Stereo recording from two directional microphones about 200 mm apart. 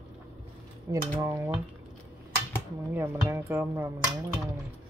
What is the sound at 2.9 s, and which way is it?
Speech, 10° right (ahead or behind).